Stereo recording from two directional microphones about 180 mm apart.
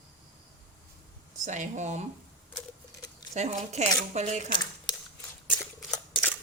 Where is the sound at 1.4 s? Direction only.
40° right (ahead or behind).